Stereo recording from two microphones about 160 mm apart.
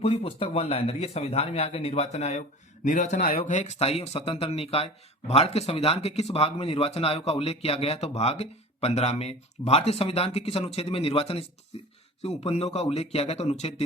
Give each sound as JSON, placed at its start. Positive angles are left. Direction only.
{"t": 0.0, "sound": "speech", "side_deg": 40}